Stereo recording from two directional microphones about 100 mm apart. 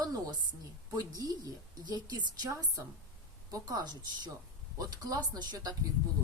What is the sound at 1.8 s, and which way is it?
A woman's voice, 45° right (ahead or behind).